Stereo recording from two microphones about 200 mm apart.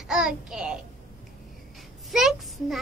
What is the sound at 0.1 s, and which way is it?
Child singing, 5° right (ahead or behind).